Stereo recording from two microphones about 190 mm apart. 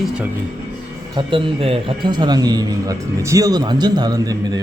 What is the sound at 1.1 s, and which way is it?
A man's voice, 25° right (ahead or behind).